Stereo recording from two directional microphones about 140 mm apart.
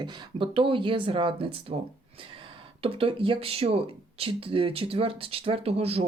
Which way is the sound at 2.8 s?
40° right (ahead or behind).